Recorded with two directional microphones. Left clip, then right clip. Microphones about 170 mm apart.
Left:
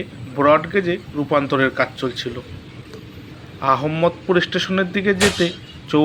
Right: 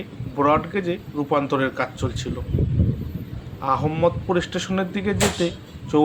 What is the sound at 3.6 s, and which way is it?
A man's voice, 10° left (ahead or behind).